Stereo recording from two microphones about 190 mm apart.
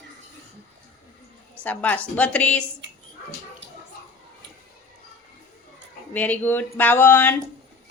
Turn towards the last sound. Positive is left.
turn(degrees=10)  # may be behind; listen again after turning